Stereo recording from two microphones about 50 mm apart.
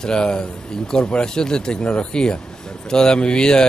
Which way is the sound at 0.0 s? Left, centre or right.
Centre.